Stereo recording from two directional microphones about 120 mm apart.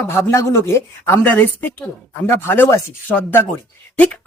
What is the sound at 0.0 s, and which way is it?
A woman's voice, 20° left (ahead or behind).